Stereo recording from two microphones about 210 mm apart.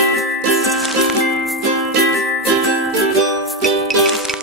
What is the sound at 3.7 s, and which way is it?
Music, centre (ahead or behind).